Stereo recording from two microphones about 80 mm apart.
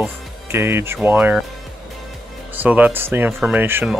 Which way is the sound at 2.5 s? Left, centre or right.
Centre.